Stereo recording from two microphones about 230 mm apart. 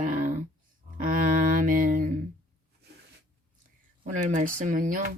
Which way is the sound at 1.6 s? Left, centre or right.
Right.